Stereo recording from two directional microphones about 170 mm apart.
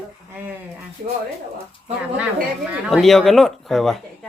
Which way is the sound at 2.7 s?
Centre (ahead or behind).